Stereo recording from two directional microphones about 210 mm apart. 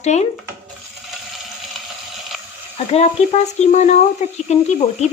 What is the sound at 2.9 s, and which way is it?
Speech, 30° left (ahead or behind).